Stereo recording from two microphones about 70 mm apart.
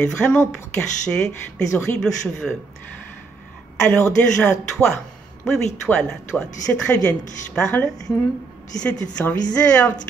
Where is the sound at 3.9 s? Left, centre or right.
Centre.